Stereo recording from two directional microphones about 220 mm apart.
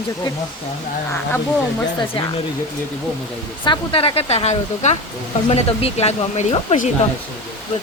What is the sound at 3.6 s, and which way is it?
Speech, 25° left (ahead or behind).